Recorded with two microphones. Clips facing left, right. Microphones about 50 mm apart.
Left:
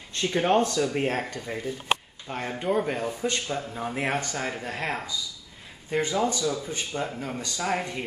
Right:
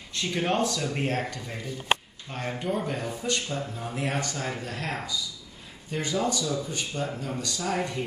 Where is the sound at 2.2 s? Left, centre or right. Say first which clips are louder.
Left 3 dB; left.